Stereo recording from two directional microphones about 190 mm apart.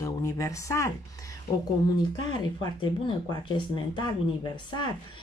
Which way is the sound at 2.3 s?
20° left (ahead or behind).